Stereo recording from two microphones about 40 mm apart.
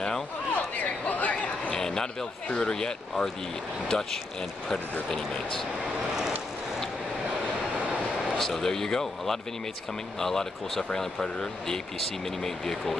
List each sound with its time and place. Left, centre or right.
0.6 s chatter: left
1.7 s a sound: centre
2.5 s speech: centre
8.4 s speech: centre